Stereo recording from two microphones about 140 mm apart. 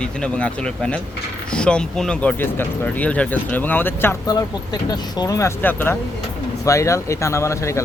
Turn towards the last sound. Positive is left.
turn(degrees=20)  # may be behind; listen again after turning